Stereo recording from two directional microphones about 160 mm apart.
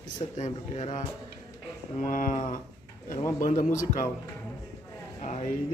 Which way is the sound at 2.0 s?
55° left (ahead or behind).